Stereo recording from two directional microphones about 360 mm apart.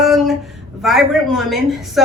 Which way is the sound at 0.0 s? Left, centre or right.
Centre.